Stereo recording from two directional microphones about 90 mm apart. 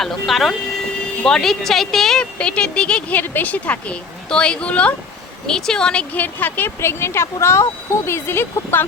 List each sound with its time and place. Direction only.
0.0 s a woman's voice: centre (ahead or behind); by 8.9 s 25° left (ahead or behind)